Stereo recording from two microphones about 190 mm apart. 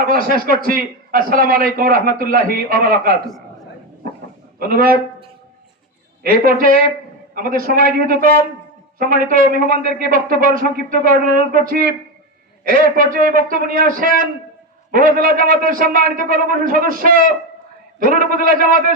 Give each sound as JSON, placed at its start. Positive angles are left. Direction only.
{"t": 0.0, "sound": "a man's voice", "side_deg": -50}
{"t": 4.7, "sound": "a man's voice", "side_deg": -50}
{"t": 6.2, "sound": "a man's voice", "side_deg": -50}